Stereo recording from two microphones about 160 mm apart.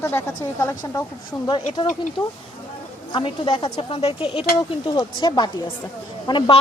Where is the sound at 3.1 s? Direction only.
30° left (ahead or behind).